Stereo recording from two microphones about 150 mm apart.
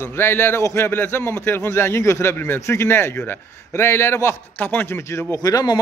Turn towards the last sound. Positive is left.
turn(degrees=25)  # may be behind; listen again after turning